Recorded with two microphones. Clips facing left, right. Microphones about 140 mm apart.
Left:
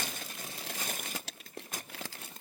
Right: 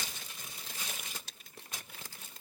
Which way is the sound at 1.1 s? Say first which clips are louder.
Left 8 dB; 90° left.